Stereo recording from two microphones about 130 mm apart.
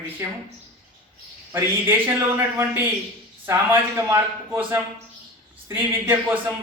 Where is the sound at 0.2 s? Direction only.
20° right (ahead or behind).